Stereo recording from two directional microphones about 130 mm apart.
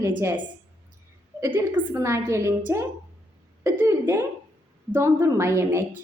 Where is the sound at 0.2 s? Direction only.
15° right (ahead or behind).